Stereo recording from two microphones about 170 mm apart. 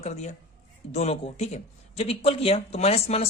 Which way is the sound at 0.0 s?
40° left (ahead or behind).